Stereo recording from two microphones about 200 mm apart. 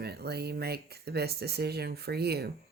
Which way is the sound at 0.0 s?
55° right (ahead or behind).